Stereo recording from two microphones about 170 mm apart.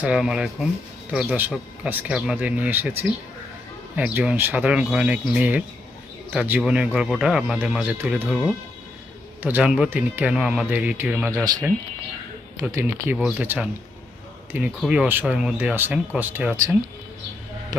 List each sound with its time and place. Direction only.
0.0 s speech: 5° right (ahead or behind)